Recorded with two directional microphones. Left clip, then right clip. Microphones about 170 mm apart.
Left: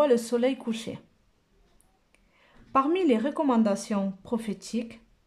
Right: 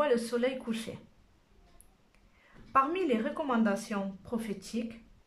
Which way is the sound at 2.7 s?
20° left (ahead or behind).